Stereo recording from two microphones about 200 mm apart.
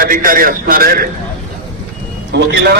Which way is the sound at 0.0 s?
45° right (ahead or behind).